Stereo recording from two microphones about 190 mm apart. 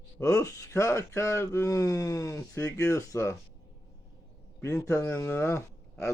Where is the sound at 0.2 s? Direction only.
15° left (ahead or behind).